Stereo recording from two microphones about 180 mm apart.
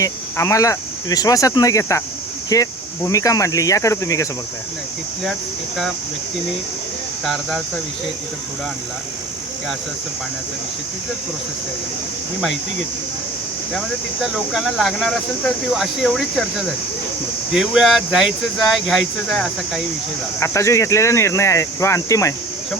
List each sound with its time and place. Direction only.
0.0 s speech: 20° left (ahead or behind)
5.2 s speech: centre (ahead or behind)
13.7 s speech: centre (ahead or behind)
20.4 s speech: 15° left (ahead or behind)